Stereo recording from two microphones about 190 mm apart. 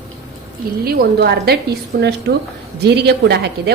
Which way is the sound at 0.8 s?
55° right (ahead or behind).